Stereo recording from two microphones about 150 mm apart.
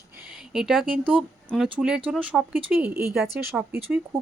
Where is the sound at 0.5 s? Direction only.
Centre (ahead or behind).